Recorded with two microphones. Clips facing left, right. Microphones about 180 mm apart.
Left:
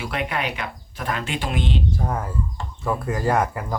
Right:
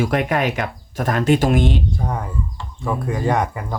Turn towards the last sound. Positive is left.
turn(degrees=0)  # may be behind; listen again after turning